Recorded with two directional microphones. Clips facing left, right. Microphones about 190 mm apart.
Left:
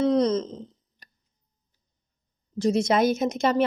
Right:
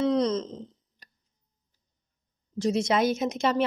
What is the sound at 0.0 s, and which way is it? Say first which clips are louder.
Wail: left 3 dB; 45° left (ahead or behind).